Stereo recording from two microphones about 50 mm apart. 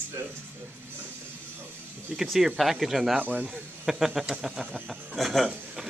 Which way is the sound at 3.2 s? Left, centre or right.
Right.